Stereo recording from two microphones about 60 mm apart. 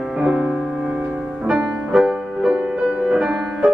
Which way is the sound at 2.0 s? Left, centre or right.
Centre.